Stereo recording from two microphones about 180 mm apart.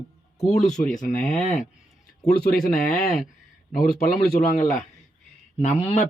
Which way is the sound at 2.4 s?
55° left (ahead or behind).